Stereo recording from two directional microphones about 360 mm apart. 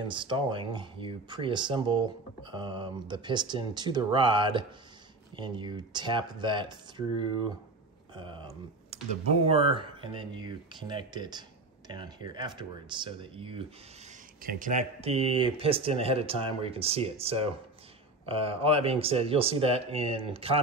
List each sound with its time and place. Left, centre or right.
0.1 s speech: centre